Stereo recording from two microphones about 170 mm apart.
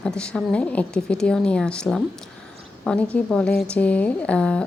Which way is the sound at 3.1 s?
5° left (ahead or behind).